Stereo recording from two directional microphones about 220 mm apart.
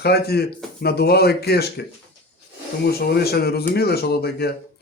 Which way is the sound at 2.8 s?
45° left (ahead or behind).